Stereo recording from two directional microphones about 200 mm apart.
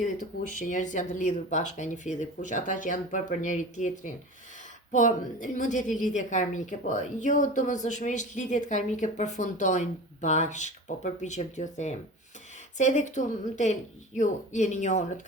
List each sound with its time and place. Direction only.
0.0 s a woman's voice: 40° left (ahead or behind)